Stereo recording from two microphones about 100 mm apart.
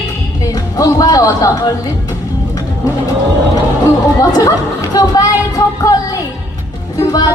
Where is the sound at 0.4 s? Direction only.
40° left (ahead or behind).